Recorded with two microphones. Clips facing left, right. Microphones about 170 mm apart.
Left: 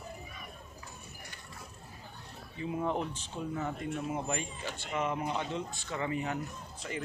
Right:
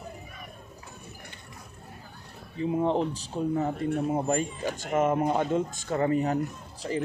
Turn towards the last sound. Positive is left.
turn(degrees=-35)  # may be behind; listen again after turning